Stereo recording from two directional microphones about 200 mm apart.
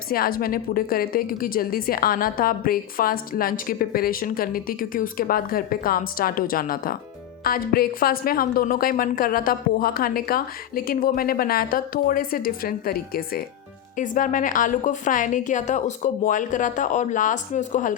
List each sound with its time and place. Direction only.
0.1 s a woman's voice: 45° left (ahead or behind)